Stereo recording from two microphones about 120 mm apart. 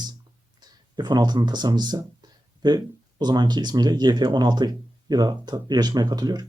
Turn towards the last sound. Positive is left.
turn(degrees=-35)  # may be behind; listen again after turning